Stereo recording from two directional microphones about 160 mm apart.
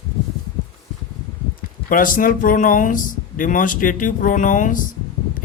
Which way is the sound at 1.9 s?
60° left (ahead or behind).